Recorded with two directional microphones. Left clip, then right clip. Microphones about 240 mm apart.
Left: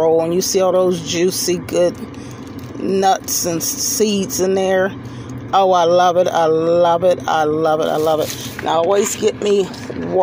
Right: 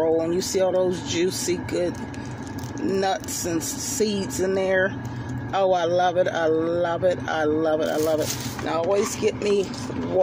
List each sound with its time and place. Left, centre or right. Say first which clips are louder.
0.2 s a man's voice: left 7 dB; centre
2.9 s a man's voice: left 9 dB; centre